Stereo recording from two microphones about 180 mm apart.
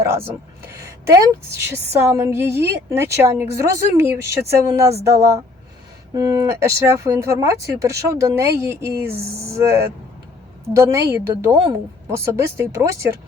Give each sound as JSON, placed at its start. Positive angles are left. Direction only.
{"t": 1.0, "sound": "speech", "side_deg": -15}